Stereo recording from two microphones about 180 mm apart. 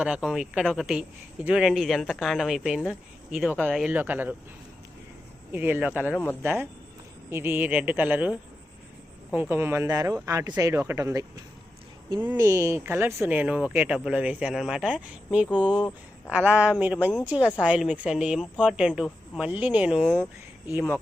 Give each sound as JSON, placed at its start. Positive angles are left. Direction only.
{"t": 0.0, "sound": "speech", "side_deg": -5}
{"t": 5.5, "sound": "speech", "side_deg": -10}
{"t": 12.3, "sound": "speech", "side_deg": -15}